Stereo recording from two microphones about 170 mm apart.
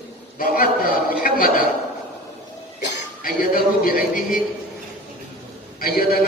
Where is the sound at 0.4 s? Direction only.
60° left (ahead or behind).